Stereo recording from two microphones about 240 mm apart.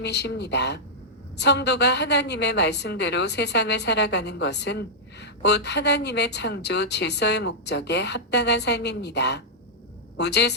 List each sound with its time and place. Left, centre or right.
0.0 s a woman's voice: left